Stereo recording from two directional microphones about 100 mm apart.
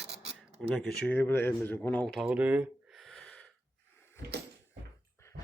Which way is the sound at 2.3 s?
15° right (ahead or behind).